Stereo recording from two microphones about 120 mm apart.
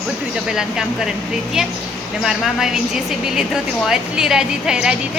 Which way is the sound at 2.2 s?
5° right (ahead or behind).